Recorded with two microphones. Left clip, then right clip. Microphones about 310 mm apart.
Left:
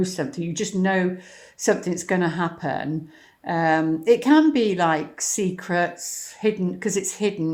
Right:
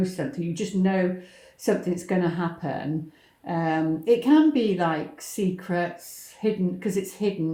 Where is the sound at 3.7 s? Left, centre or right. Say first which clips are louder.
Left 2 dB; left.